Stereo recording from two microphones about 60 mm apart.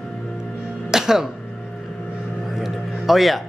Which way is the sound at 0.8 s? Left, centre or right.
Centre.